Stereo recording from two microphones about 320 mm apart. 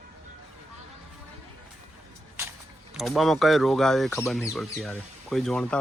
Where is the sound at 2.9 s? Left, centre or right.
Centre.